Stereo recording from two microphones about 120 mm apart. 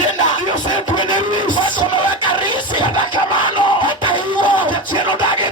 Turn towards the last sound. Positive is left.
turn(degrees=-40)  # may be behind; listen again after turning